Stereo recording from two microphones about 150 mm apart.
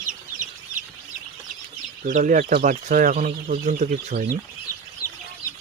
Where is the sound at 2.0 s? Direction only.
60° right (ahead or behind).